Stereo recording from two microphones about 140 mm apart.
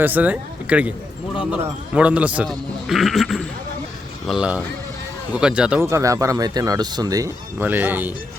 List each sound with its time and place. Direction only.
0.0 s speech: 10° right (ahead or behind)
2.0 s speech: 10° right (ahead or behind)
5.8 s speech: 20° right (ahead or behind)
7.6 s speech: 15° right (ahead or behind)